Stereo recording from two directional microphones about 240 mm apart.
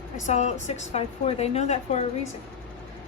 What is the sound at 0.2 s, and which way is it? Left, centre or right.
A woman's voice, left.